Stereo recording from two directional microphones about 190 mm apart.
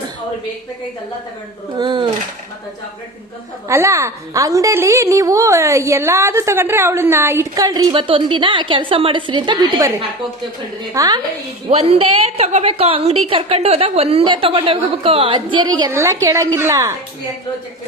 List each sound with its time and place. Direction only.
1.8 s a woman's voice: 25° right (ahead or behind)
3.7 s a woman's voice: 15° right (ahead or behind)
10.9 s a woman's voice: 20° right (ahead or behind)
11.7 s a woman's voice: 30° right (ahead or behind)
15.9 s a woman's voice: 15° right (ahead or behind)